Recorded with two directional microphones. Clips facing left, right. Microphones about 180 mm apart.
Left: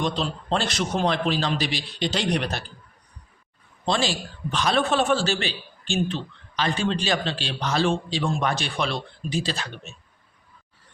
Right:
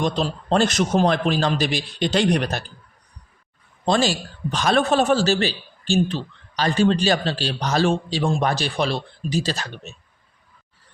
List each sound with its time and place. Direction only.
0.0 s a man's voice: 45° right (ahead or behind)
3.8 s a man's voice: 45° right (ahead or behind)